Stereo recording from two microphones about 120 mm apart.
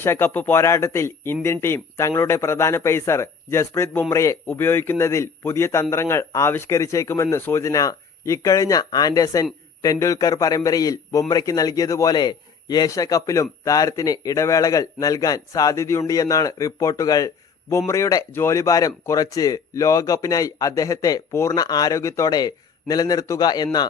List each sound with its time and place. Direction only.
0.0 s speech: 20° left (ahead or behind); by 23.6 s 35° left (ahead or behind)